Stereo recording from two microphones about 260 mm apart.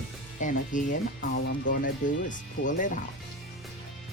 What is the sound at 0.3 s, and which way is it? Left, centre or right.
Speech, left.